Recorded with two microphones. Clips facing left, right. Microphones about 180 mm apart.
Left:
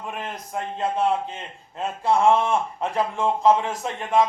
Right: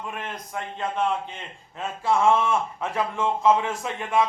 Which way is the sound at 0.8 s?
35° left (ahead or behind).